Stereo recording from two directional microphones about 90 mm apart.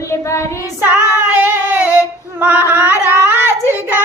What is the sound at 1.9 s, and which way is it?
Female singing, 20° right (ahead or behind).